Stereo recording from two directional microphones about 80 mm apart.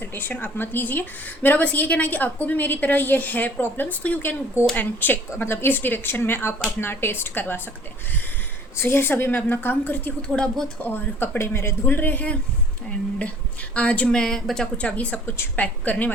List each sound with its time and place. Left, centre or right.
0.0 s a woman's voice: left
8.8 s a woman's voice: left
10.2 s speech: centre
10.8 s a woman's voice: left
13.7 s a woman's voice: centre